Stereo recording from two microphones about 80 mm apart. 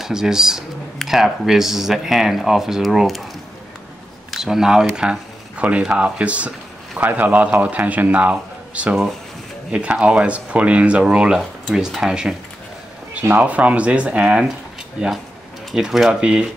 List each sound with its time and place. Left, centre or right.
0.0 s speech: centre
4.3 s a man's voice: centre
13.4 s speech: centre
15.7 s speech: centre